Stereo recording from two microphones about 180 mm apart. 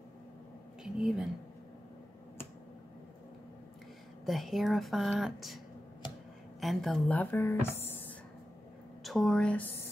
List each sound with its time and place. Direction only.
0.8 s speech: 5° right (ahead or behind)
4.3 s speech: centre (ahead or behind)
6.0 s a sound: 25° left (ahead or behind)
6.6 s a woman's voice: centre (ahead or behind)
9.0 s a woman's voice: centre (ahead or behind)